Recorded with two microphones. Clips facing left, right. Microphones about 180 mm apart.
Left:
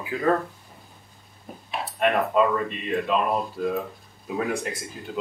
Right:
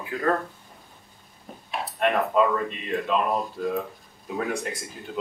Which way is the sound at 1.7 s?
Centre (ahead or behind).